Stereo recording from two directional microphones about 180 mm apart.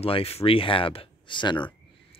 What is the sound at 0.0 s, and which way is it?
Speech, 35° left (ahead or behind).